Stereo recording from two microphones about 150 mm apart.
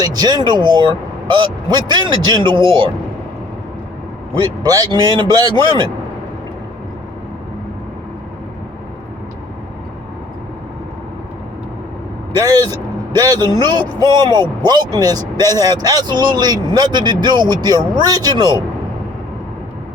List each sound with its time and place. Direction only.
0.0 s a man's voice: 25° right (ahead or behind)
4.6 s a man's voice: 25° right (ahead or behind)
13.1 s a man's voice: 25° right (ahead or behind)